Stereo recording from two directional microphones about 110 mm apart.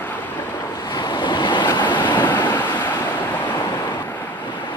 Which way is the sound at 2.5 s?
20° left (ahead or behind).